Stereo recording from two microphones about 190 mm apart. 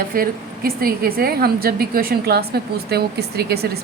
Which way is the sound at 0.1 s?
50° right (ahead or behind).